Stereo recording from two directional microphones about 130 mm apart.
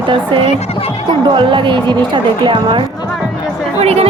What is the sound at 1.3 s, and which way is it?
A woman's voice, 40° right (ahead or behind).